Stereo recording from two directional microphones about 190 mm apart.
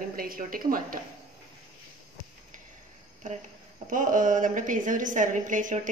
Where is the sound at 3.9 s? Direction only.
45° right (ahead or behind).